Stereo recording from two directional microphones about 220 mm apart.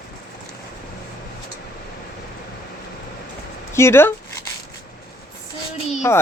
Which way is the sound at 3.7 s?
10° left (ahead or behind).